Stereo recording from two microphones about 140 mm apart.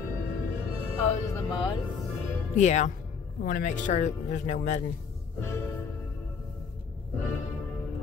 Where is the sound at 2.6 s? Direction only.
60° left (ahead or behind).